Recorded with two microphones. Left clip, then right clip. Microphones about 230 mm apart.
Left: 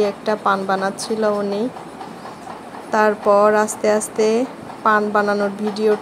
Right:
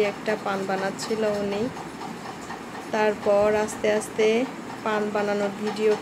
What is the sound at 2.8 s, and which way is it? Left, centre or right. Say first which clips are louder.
Speech: left 7 dB; left.